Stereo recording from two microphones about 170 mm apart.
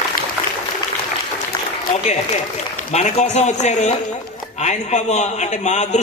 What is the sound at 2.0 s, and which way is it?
A man's voice, 45° left (ahead or behind).